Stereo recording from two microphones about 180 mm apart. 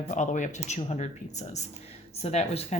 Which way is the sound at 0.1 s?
40° left (ahead or behind).